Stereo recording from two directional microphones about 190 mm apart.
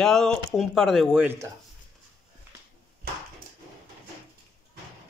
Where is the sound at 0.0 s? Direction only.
5° left (ahead or behind).